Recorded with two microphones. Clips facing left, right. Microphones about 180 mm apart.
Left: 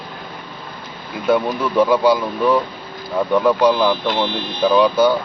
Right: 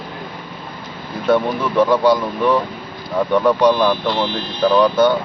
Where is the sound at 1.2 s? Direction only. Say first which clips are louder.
Right 1 dB; centre (ahead or behind).